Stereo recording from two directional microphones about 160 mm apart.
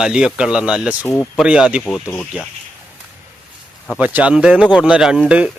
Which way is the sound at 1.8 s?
15° left (ahead or behind).